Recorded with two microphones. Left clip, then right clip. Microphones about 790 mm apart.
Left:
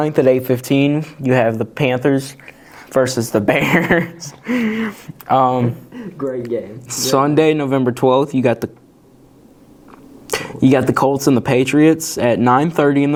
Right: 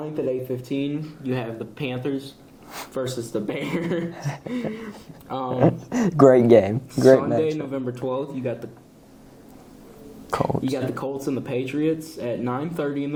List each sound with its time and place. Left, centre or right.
0.0 s speech: left
5.9 s speech: right
6.8 s speech: left
10.3 s speech: left